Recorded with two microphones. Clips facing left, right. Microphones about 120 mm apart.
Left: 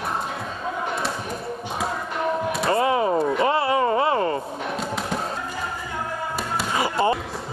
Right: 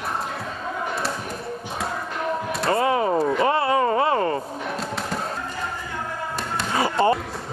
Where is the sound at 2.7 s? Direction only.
25° left (ahead or behind).